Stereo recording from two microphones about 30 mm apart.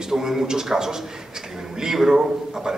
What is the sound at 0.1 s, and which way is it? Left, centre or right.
A man's voice, centre.